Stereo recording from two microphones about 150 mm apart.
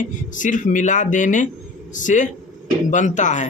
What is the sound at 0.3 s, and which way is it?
Speech, 60° left (ahead or behind).